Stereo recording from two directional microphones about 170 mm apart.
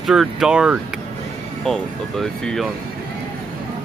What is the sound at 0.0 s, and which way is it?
Speech, centre (ahead or behind).